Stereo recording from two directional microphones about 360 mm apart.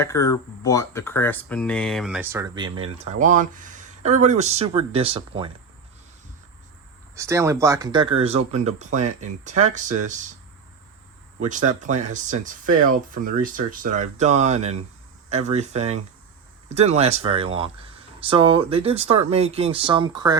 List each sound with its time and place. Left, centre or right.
0.0 s speech: centre
7.2 s speech: centre
11.3 s speech: centre